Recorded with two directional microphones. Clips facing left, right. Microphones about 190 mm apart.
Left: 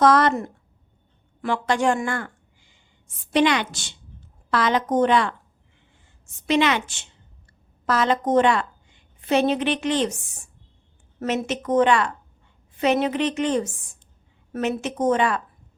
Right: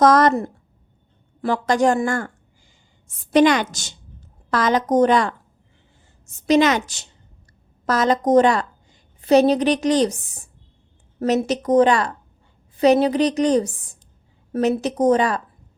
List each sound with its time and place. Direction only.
0.0 s a woman's voice: 40° right (ahead or behind)
3.3 s a woman's voice: 45° right (ahead or behind)
6.4 s a woman's voice: 40° right (ahead or behind)